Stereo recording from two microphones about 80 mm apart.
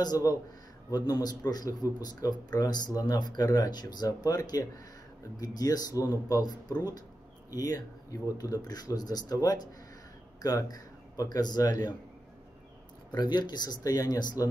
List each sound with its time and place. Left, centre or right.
0.0 s speech: left
13.1 s speech: left